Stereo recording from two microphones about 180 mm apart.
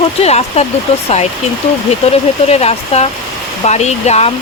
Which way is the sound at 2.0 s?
35° left (ahead or behind).